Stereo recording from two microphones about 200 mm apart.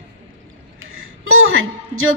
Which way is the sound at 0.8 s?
90° right.